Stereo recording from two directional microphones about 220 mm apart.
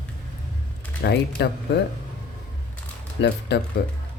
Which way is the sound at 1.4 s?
50° left (ahead or behind).